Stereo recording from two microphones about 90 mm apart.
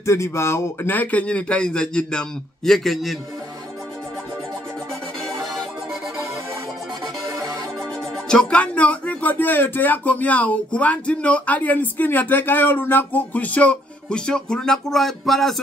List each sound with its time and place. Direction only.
0.0 s speech: 30° left (ahead or behind); by 3.2 s centre (ahead or behind)
5.2 s music: centre (ahead or behind)
8.3 s speech: 10° left (ahead or behind)